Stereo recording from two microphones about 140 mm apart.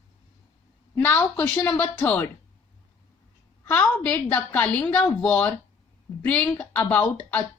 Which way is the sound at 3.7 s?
10° left (ahead or behind).